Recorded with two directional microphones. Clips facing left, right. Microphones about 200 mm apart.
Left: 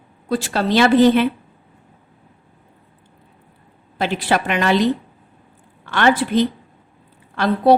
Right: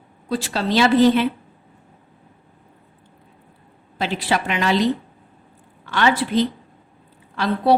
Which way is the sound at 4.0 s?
55° left (ahead or behind).